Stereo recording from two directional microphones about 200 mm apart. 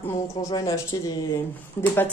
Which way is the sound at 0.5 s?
15° left (ahead or behind).